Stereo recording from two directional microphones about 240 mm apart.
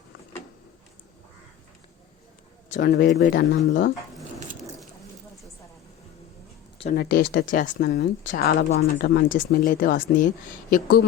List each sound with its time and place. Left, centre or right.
2.6 s speech: left
6.9 s speech: left